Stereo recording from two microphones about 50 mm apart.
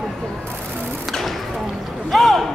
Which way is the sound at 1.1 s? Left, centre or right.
Centre.